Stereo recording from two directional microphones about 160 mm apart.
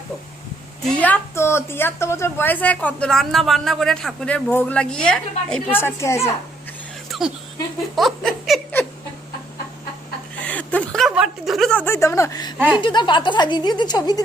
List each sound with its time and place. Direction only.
0.9 s a woman's voice: 10° left (ahead or behind)
5.7 s a woman's voice: 15° left (ahead or behind)
7.1 s a sound: 5° right (ahead or behind)
7.9 s speech: centre (ahead or behind)
10.4 s a sound: 10° left (ahead or behind); by 12.5 s 25° left (ahead or behind)
12.7 s a woman's voice: 30° left (ahead or behind)